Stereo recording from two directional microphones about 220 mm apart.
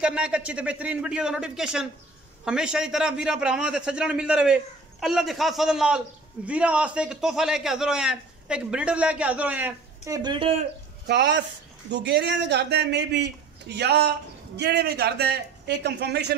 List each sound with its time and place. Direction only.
0.0 s a man's voice: 5° right (ahead or behind); by 10.7 s 25° right (ahead or behind)
11.1 s a man's voice: 50° right (ahead or behind)